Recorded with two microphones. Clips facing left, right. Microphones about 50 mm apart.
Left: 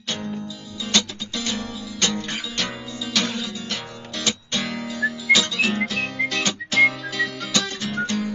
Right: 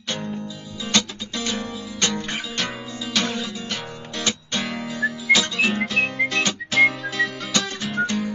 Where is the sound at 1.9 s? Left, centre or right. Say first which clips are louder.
Even; right.